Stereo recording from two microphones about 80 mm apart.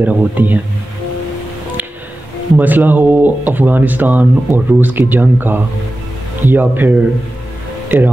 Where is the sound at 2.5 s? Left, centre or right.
Right.